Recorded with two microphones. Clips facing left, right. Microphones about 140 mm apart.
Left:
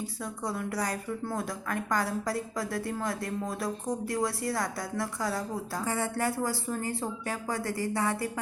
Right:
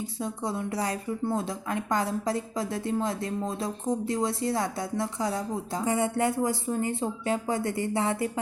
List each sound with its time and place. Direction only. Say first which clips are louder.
0.2 s a woman's voice: right 4 dB; 25° right (ahead or behind)